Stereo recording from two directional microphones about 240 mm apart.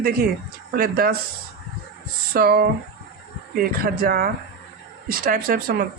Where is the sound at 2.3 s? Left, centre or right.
Right.